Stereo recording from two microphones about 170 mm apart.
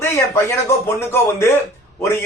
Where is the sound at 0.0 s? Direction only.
15° left (ahead or behind).